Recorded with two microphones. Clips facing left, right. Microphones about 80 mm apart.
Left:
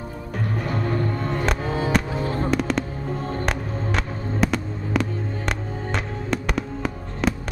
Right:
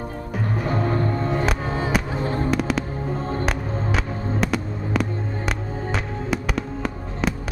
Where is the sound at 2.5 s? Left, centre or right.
Centre.